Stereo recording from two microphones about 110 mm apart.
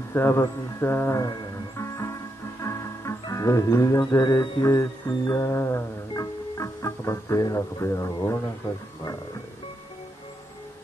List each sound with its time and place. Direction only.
0.1 s music: 25° left (ahead or behind)
4.0 s music: 40° left (ahead or behind)